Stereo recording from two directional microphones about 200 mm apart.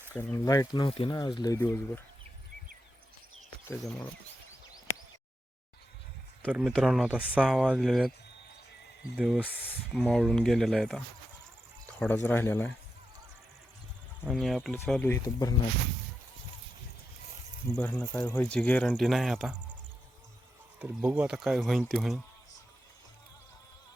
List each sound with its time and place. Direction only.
0.1 s speech: 10° left (ahead or behind)
3.7 s speech: 10° left (ahead or behind)
6.5 s speech: centre (ahead or behind)
9.1 s speech: centre (ahead or behind)
11.9 s speech: 10° left (ahead or behind)
14.3 s speech: centre (ahead or behind)
17.7 s speech: 5° left (ahead or behind)
20.7 s speech: 5° right (ahead or behind)